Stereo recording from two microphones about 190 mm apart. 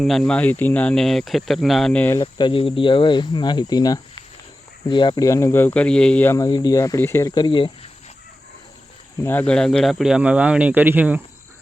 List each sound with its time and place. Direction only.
0.0 s speech: centre (ahead or behind)
2.1 s speech: 25° left (ahead or behind)
9.2 s speech: 10° left (ahead or behind); by 11.2 s 10° right (ahead or behind)